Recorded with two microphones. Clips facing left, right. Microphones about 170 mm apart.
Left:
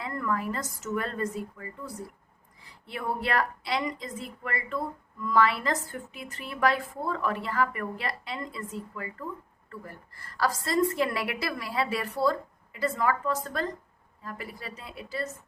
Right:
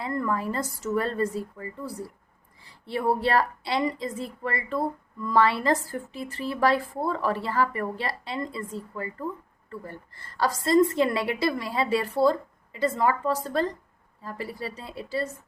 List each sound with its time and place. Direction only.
0.0 s a woman's voice: 30° right (ahead or behind)